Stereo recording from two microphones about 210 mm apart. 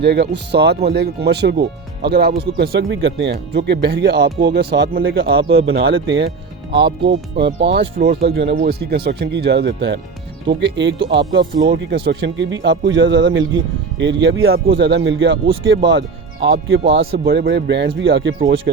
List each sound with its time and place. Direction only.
0.0 s speech: 50° right (ahead or behind)
5.5 s speech: 75° right (ahead or behind)
6.7 s speech: 55° right (ahead or behind); by 14.6 s 80° right
14.8 s speech: 55° right (ahead or behind)